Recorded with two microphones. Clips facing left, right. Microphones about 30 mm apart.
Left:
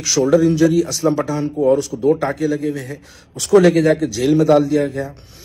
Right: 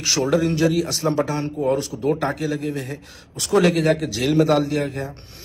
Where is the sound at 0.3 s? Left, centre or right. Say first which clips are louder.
Left 7 dB; right.